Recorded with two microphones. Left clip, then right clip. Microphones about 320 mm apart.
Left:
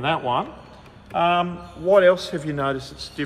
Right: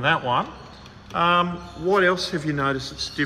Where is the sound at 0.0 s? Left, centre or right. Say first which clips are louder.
Right 1 dB; centre.